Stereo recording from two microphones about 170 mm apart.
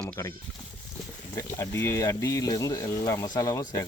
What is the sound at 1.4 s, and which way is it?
Speech, 15° left (ahead or behind).